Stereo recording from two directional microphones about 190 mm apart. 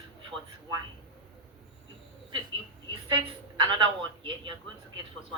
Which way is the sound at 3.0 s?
25° right (ahead or behind).